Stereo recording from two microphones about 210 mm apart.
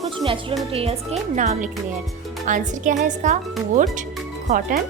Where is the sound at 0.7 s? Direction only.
25° right (ahead or behind).